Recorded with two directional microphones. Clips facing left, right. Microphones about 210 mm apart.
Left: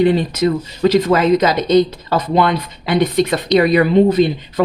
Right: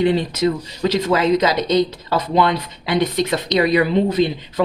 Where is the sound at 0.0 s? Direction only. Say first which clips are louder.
Left 3 dB; 50° left (ahead or behind).